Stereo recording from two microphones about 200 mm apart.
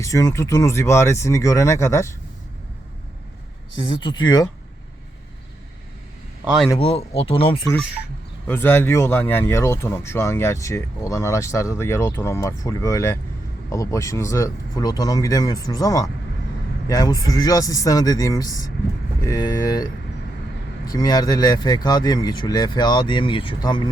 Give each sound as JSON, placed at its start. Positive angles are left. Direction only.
{"t": 0.0, "sound": "speech", "side_deg": 15}
{"t": 3.8, "sound": "speech", "side_deg": 25}
{"t": 6.4, "sound": "a man's voice", "side_deg": -5}
{"t": 6.7, "sound": "speech", "side_deg": 30}
{"t": 8.4, "sound": "speech", "side_deg": 10}